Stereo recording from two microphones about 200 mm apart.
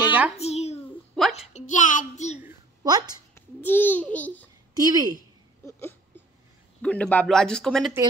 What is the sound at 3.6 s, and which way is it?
Speech, 10° left (ahead or behind).